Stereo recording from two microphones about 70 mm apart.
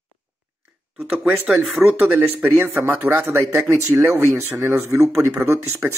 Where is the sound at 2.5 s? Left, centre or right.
Right.